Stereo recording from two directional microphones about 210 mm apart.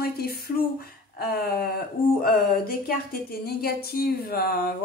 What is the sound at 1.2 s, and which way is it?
Speech, 45° left (ahead or behind).